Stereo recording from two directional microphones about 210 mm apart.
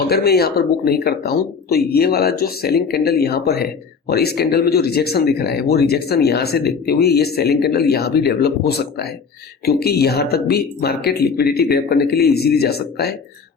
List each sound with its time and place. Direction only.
0.1 s speech: 50° left (ahead or behind)